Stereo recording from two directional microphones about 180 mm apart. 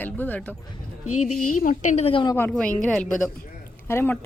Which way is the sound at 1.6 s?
45° left (ahead or behind).